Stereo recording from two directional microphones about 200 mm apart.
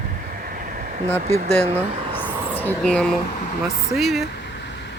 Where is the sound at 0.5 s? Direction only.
45° right (ahead or behind).